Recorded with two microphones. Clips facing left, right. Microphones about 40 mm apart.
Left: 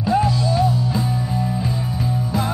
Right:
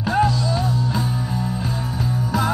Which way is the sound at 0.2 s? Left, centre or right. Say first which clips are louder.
Left 1 dB; centre.